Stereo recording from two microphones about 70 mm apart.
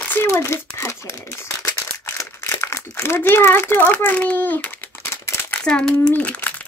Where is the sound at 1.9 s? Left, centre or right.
Left.